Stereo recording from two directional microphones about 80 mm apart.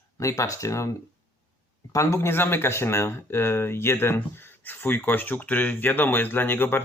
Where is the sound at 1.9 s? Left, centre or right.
Left.